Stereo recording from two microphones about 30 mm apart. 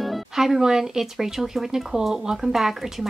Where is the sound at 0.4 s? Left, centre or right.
Centre.